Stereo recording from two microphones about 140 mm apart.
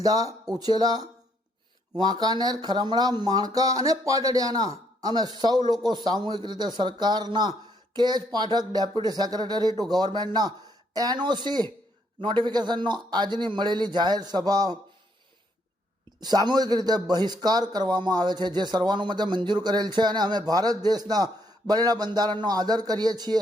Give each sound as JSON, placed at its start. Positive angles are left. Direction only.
{"t": 0.0, "sound": "a man's voice", "side_deg": -25}
{"t": 16.2, "sound": "a man's voice", "side_deg": -30}